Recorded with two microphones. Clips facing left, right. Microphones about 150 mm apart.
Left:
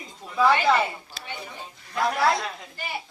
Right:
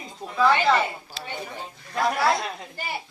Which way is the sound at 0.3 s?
10° left (ahead or behind).